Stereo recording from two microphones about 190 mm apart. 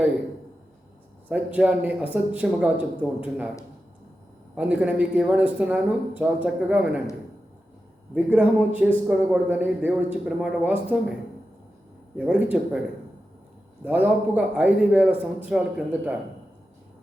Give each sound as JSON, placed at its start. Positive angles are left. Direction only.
{"t": 1.3, "sound": "speech", "side_deg": -5}
{"t": 4.5, "sound": "speech", "side_deg": -5}
{"t": 8.1, "sound": "speech", "side_deg": -10}
{"t": 12.1, "sound": "speech", "side_deg": -5}
{"t": 13.8, "sound": "speech", "side_deg": -10}